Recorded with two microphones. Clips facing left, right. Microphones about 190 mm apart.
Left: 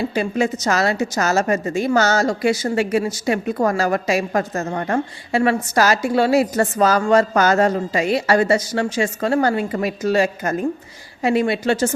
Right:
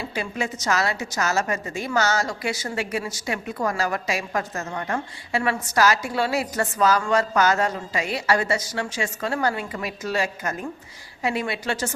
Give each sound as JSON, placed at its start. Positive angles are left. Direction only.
{"t": 0.2, "sound": "a woman's voice", "side_deg": 45}
{"t": 5.8, "sound": "a woman's voice", "side_deg": 45}
{"t": 6.3, "sound": "a woman's voice", "side_deg": 35}
{"t": 11.6, "sound": "speech", "side_deg": 25}